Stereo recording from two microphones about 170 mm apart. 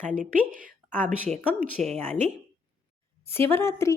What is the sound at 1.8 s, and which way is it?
Speech, 45° right (ahead or behind).